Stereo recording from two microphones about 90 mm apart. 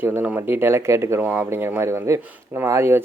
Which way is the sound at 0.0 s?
20° right (ahead or behind).